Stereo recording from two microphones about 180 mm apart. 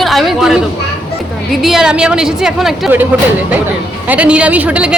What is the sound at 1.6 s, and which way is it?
A woman's voice, 5° right (ahead or behind).